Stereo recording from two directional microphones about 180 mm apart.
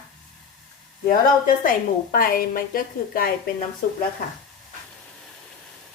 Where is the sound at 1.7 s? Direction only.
50° left (ahead or behind).